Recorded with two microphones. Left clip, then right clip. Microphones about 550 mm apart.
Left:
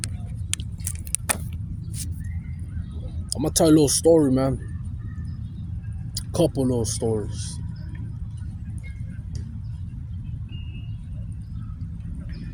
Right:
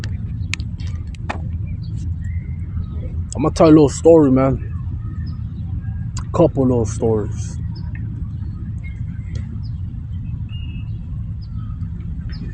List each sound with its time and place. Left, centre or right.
1.3 s a sound: left
3.3 s speech: left
6.1 s speech: left